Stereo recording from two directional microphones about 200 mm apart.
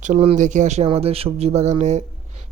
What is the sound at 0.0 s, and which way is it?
Speech, 35° right (ahead or behind).